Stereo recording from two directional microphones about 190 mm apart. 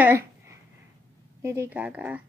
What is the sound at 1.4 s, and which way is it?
Speech, 15° right (ahead or behind).